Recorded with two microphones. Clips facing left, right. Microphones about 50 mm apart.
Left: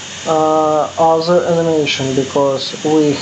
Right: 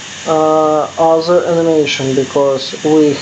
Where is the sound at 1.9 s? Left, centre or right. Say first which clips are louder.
Right 2 dB; right.